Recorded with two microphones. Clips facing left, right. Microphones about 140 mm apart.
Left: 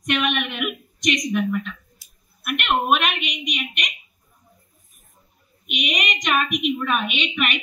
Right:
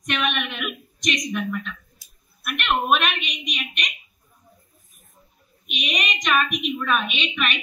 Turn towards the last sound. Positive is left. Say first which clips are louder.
# left 2 dB
turn(degrees=15)  # may be behind; listen again after turning